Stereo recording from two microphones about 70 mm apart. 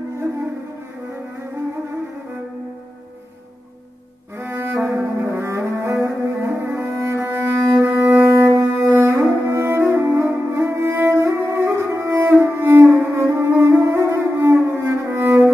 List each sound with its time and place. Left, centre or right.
4.4 s music: right
7.7 s cello: right
11.1 s music: right
12.8 s music: right